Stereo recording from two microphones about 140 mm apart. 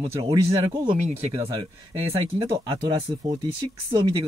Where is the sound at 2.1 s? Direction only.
40° right (ahead or behind).